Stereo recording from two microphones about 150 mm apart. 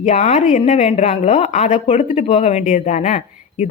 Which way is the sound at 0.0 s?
45° left (ahead or behind).